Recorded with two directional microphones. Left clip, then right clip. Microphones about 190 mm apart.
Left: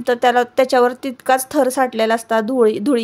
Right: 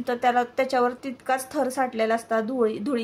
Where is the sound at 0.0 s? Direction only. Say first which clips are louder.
Left 8 dB; 40° left (ahead or behind).